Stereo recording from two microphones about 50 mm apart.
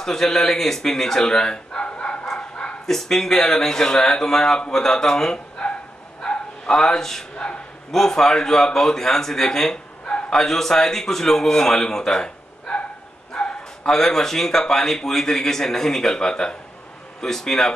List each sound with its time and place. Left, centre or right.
0.0 s a man's voice: centre
2.2 s bow-wow: centre
3.0 s speech: centre
6.2 s bow-wow: centre
7.9 s speech: centre
13.3 s bow-wow: centre
13.9 s speech: centre